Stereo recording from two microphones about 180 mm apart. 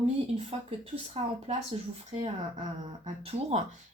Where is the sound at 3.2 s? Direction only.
40° right (ahead or behind).